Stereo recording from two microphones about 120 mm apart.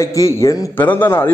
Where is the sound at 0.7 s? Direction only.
15° left (ahead or behind).